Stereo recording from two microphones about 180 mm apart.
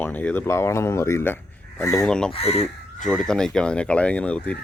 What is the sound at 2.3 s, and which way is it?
Speech, 35° left (ahead or behind).